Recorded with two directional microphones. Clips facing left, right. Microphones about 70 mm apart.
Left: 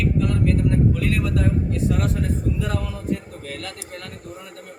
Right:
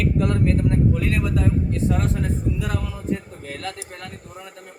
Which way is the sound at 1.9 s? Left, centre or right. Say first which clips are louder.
Even; centre.